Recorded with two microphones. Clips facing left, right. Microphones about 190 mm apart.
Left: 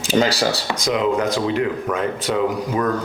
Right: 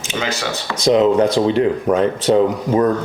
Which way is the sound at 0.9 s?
30° right (ahead or behind).